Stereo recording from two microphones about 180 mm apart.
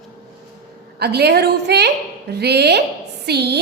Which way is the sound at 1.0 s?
65° right (ahead or behind).